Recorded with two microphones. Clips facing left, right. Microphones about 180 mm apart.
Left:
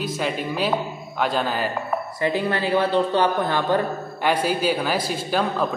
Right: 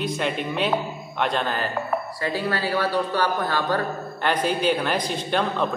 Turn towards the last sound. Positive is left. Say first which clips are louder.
# left 1 dB
turn(degrees=5)  # may be behind; listen again after turning